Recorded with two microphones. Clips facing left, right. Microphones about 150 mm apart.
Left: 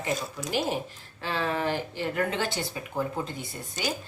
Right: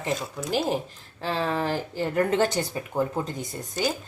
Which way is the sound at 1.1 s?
35° right (ahead or behind).